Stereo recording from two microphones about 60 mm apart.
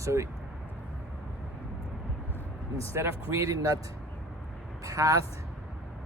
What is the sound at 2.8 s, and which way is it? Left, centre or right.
Speech, right.